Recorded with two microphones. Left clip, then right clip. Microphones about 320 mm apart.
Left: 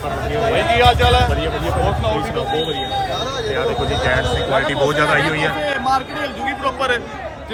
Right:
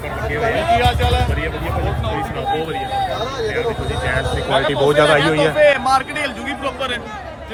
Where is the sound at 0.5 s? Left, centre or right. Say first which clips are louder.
Left 4 dB; left.